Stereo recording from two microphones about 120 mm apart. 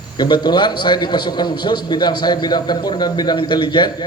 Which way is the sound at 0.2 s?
40° left (ahead or behind).